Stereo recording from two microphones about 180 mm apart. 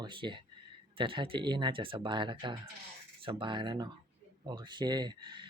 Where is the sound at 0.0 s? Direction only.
25° right (ahead or behind).